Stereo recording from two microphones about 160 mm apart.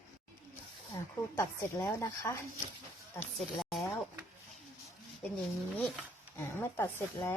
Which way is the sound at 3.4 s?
Centre (ahead or behind).